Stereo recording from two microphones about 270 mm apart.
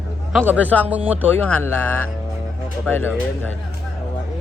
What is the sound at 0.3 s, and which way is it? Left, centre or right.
Speech, centre.